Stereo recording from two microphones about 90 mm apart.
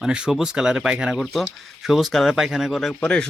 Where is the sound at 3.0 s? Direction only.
10° left (ahead or behind).